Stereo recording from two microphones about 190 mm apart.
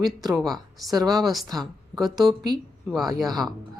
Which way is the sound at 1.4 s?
20° right (ahead or behind).